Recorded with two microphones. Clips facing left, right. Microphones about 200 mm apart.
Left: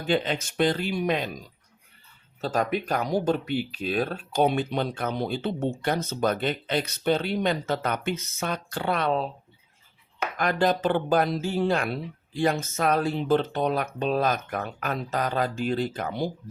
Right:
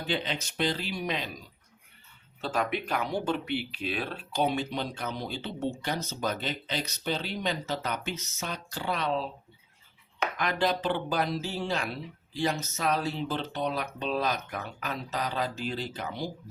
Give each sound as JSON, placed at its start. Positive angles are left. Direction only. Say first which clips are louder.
{"t": 0.0, "sound": "speech", "louder": "left 6 dB", "side_deg": 50}
{"t": 2.4, "sound": "speech", "louder": "left 4 dB", "side_deg": 40}
{"t": 10.3, "sound": "speech", "louder": "left 5 dB", "side_deg": 45}